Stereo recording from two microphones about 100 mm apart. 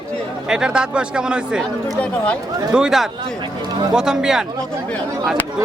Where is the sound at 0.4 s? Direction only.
10° right (ahead or behind).